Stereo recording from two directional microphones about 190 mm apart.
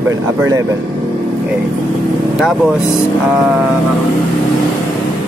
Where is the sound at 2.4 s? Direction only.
5° right (ahead or behind).